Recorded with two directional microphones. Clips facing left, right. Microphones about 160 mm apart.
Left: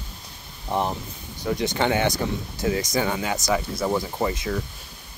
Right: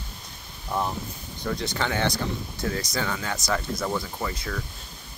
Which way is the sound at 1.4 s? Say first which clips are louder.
Left 5 dB; 20° left (ahead or behind).